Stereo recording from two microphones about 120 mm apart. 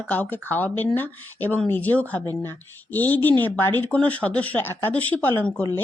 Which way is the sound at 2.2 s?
30° right (ahead or behind).